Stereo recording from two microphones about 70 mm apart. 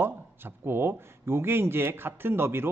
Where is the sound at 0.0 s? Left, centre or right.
Right.